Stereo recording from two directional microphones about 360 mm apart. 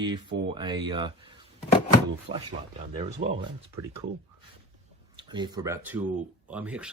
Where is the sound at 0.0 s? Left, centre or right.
Centre.